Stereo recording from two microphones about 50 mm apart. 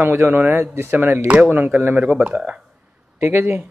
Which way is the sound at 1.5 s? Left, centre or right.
Right.